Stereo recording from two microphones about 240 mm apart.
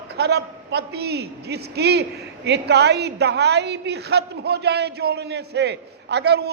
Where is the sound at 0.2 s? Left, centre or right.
Right.